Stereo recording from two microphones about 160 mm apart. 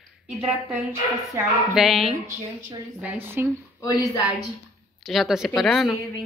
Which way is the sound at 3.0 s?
10° right (ahead or behind).